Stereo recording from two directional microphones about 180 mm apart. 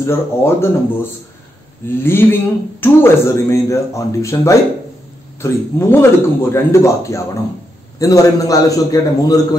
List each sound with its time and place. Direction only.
0.0 s a man's voice: 15° left (ahead or behind)